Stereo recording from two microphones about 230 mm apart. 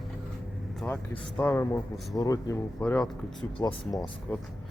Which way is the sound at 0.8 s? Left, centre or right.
Centre.